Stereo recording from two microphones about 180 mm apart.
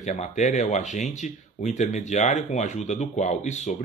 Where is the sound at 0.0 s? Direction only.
45° left (ahead or behind).